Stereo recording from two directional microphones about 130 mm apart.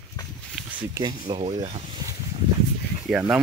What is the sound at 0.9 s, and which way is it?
Speech, 30° right (ahead or behind).